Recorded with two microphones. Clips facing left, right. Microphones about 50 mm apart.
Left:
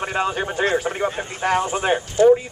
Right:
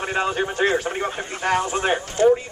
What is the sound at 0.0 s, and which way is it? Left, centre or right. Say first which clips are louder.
Speech: even; centre.